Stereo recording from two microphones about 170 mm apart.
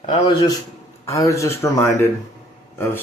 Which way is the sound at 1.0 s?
20° left (ahead or behind).